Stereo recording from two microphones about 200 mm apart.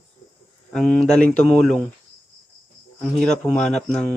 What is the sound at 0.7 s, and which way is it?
Speech, 5° left (ahead or behind).